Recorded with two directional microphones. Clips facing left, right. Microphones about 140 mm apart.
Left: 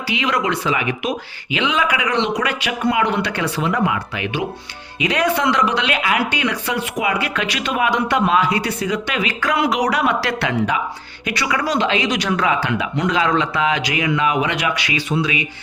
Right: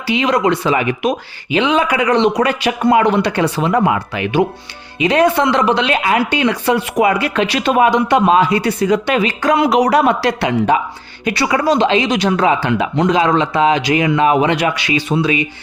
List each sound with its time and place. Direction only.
0.3 s speech: 35° right (ahead or behind)
5.0 s speech: 30° right (ahead or behind)
7.9 s speech: 20° right (ahead or behind)
8.8 s speech: 40° right (ahead or behind)
10.2 s speech: 20° right (ahead or behind)
11.3 s speech: 30° right (ahead or behind)